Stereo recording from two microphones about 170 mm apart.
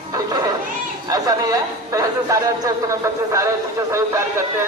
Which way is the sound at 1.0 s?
20° right (ahead or behind).